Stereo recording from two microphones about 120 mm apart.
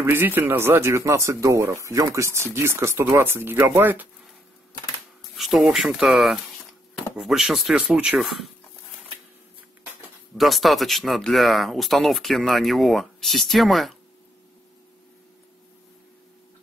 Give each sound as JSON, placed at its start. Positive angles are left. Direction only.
{"t": 0.0, "sound": "speech", "side_deg": -20}
{"t": 5.3, "sound": "speech", "side_deg": 0}
{"t": 10.3, "sound": "speech", "side_deg": 0}